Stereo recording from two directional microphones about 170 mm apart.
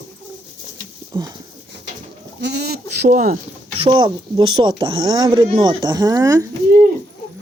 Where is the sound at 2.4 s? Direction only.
75° right (ahead or behind); by 3.4 s 55° right (ahead or behind).